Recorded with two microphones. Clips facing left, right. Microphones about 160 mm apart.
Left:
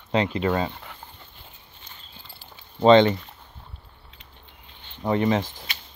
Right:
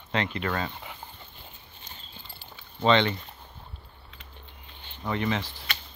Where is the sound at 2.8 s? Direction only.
40° left (ahead or behind).